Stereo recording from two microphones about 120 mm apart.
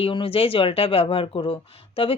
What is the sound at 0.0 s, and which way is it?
Speech, 50° left (ahead or behind).